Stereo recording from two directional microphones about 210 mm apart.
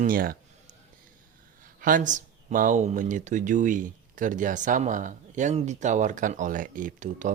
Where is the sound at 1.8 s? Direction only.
40° right (ahead or behind).